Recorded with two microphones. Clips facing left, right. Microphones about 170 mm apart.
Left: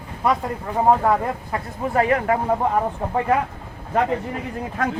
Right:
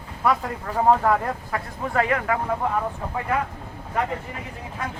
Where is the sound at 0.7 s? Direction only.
25° left (ahead or behind).